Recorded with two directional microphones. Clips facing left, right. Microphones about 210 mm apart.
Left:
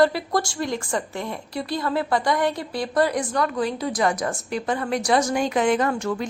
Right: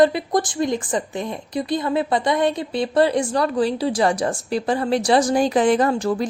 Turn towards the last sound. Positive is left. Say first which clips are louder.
# right 4 dB
turn(degrees=-35)  # may be behind; listen again after turning